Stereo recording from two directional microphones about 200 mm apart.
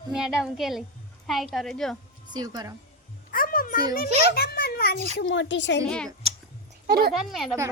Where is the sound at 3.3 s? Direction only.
45° left (ahead or behind).